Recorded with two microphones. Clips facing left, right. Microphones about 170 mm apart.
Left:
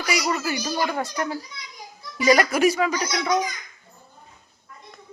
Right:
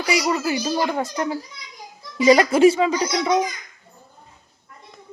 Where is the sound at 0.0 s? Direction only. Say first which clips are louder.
Right 4 dB; 20° right (ahead or behind).